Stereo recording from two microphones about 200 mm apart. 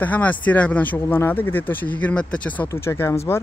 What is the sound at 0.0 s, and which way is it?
Speech, 10° left (ahead or behind).